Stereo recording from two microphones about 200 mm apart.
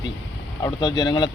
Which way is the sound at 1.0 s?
20° left (ahead or behind).